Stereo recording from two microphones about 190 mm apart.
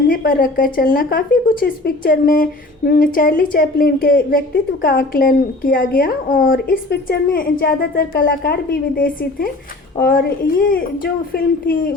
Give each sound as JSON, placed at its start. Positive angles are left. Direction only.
{"t": 0.1, "sound": "a woman's voice", "side_deg": 50}